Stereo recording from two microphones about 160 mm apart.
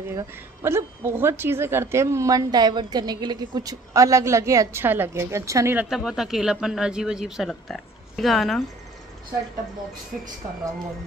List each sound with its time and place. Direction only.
0.1 s a woman's voice: 20° right (ahead or behind)
5.9 s a man's voice: 5° right (ahead or behind)